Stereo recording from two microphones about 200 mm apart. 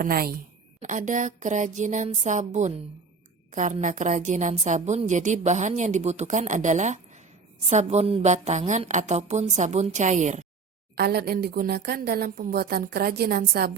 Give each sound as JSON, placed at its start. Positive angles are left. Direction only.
{"t": 0.0, "sound": "a woman's voice", "side_deg": -45}
{"t": 10.9, "sound": "a woman's voice", "side_deg": -50}